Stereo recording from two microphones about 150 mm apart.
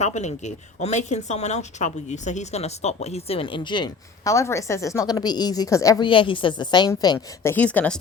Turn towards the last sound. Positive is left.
turn(degrees=10)  # may be behind; listen again after turning